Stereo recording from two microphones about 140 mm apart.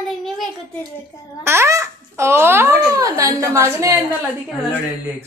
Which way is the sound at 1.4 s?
20° right (ahead or behind).